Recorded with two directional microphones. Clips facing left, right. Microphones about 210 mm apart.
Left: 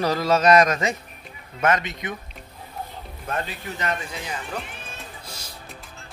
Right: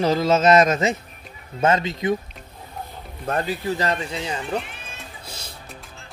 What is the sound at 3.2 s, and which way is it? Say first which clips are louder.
Speech: right 7 dB; 35° right (ahead or behind).